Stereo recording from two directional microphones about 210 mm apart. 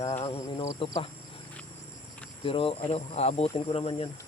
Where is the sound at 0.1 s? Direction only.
30° left (ahead or behind).